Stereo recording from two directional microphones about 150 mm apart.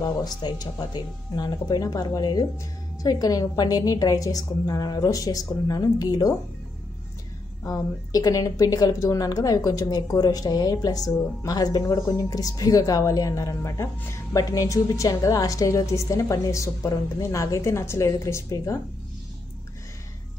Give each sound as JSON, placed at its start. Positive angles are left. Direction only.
{"t": 0.0, "sound": "a woman's voice", "side_deg": 25}
{"t": 7.6, "sound": "a woman's voice", "side_deg": 25}